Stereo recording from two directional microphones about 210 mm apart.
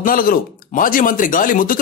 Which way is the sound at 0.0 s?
40° left (ahead or behind).